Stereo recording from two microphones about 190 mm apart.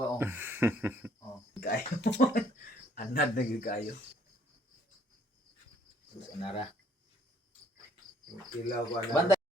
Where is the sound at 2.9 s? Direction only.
45° left (ahead or behind).